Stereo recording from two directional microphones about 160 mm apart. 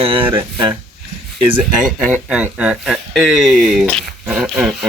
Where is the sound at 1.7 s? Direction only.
5° right (ahead or behind).